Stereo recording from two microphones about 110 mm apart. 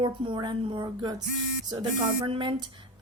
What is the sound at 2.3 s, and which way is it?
Speech, 45° right (ahead or behind).